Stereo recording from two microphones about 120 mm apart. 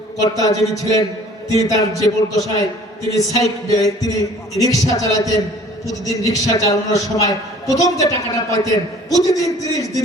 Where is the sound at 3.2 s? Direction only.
30° left (ahead or behind).